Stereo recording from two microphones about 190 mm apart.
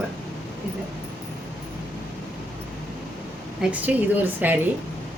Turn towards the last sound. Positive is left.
turn(degrees=-10)  # may be behind; listen again after turning